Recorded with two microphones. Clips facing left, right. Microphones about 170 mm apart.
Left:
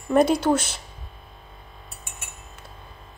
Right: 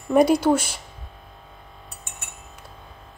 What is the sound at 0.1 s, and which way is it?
Speech, 10° right (ahead or behind).